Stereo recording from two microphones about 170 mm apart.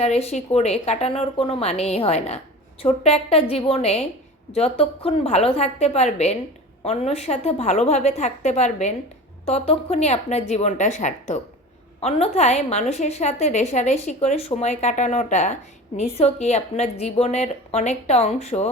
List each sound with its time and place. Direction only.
0.0 s a woman's voice: 40° left (ahead or behind)